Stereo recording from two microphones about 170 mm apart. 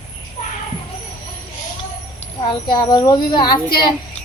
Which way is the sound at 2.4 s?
25° left (ahead or behind).